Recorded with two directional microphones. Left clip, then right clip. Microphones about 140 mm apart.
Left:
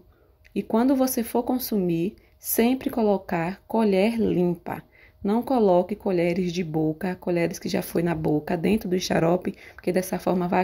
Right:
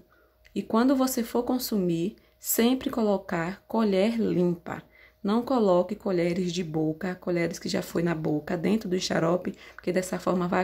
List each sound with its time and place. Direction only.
0.6 s speech: 15° left (ahead or behind)